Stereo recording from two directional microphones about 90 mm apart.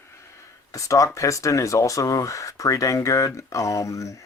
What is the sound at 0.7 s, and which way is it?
Speech, 40° left (ahead or behind).